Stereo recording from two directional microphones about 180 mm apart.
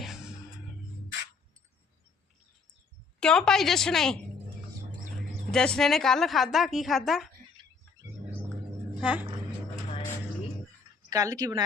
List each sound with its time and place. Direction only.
0.0 s music: 5° right (ahead or behind)
3.2 s a woman's voice: 5° left (ahead or behind)
5.5 s a woman's voice: 5° left (ahead or behind)
9.0 s a woman's voice: 5° right (ahead or behind)
11.1 s a woman's voice: 20° right (ahead or behind)